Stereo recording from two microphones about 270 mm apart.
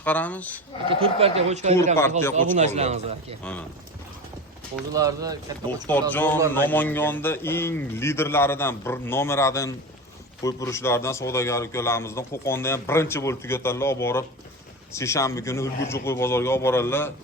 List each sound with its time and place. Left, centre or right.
0.0 s speech: centre
0.9 s a man's voice: right
2.0 s a man's voice: centre
2.3 s a man's voice: right
4.9 s speech: centre
5.9 s a man's voice: centre